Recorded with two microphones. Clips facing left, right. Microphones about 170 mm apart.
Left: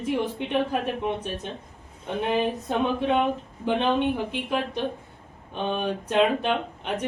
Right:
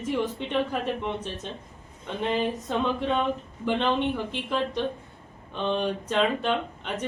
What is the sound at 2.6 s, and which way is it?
Speech, 15° left (ahead or behind).